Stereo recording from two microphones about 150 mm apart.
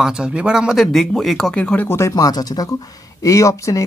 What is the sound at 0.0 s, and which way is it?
Speech, 5° right (ahead or behind).